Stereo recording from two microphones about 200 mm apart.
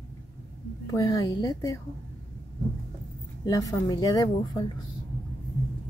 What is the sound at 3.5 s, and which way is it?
Speech, 15° left (ahead or behind).